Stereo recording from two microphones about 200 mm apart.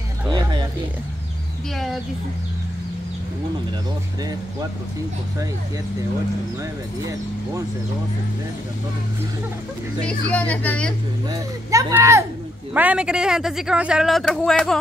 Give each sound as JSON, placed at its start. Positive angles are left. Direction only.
{"t": 0.3, "sound": "music", "side_deg": -20}
{"t": 10.0, "sound": "speech", "side_deg": 5}
{"t": 11.2, "sound": "speech", "side_deg": -15}